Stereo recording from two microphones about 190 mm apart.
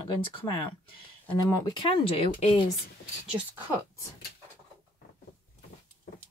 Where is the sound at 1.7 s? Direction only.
25° left (ahead or behind).